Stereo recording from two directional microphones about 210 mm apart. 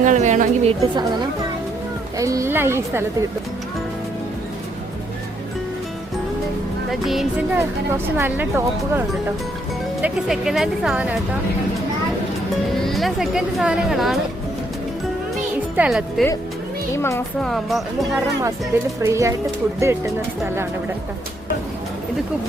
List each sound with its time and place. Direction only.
0.0 s a woman's voice: 35° right (ahead or behind)
2.1 s a woman's voice: 15° right (ahead or behind)
7.0 s a woman's voice: centre (ahead or behind)
12.8 s speech: centre (ahead or behind)
15.7 s speech: 5° right (ahead or behind)
16.9 s speech: 10° left (ahead or behind)
19.0 s a woman's voice: 15° right (ahead or behind)